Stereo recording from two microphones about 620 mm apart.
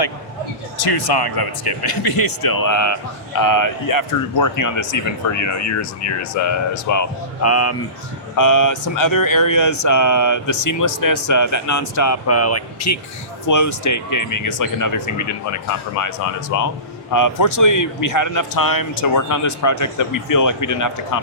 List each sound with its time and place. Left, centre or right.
0.8 s speech: left